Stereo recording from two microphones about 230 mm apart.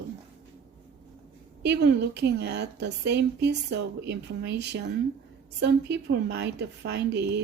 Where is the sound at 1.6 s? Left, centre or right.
Right.